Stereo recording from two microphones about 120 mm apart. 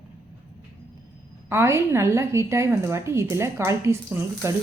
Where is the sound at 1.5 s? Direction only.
20° right (ahead or behind).